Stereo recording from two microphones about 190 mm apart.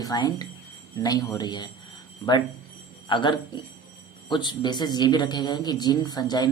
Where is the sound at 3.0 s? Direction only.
25° left (ahead or behind).